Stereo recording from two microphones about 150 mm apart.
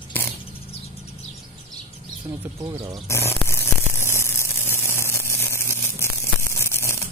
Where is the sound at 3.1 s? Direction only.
15° left (ahead or behind).